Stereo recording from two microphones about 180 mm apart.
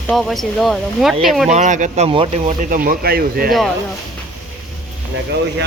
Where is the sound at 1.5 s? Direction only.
45° right (ahead or behind).